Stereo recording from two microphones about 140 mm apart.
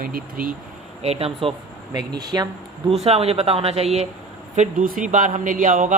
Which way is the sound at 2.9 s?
45° right (ahead or behind).